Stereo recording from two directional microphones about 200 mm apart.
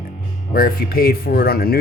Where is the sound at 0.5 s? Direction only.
45° left (ahead or behind).